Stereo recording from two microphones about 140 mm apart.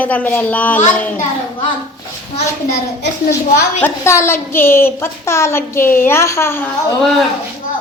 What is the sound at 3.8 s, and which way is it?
A woman's voice, 20° left (ahead or behind).